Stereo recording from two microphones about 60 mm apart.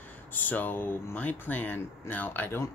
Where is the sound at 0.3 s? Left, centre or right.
Left.